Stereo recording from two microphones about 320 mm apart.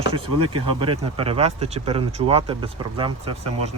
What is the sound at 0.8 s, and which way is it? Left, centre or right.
Speech, centre.